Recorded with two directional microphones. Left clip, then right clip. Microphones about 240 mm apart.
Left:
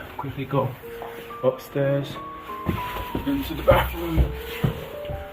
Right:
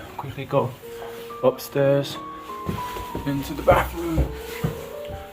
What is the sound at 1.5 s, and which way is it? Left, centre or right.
Speech, right.